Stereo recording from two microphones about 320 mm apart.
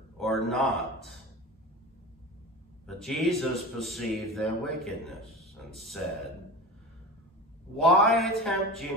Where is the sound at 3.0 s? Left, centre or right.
Centre.